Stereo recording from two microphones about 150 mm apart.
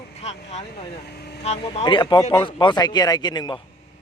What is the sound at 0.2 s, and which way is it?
Speech, 45° left (ahead or behind).